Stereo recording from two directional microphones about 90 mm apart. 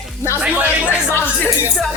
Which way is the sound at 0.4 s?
15° right (ahead or behind).